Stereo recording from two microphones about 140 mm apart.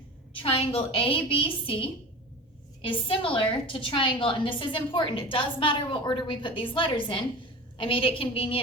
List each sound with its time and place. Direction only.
0.3 s a woman's voice: 45° left (ahead or behind)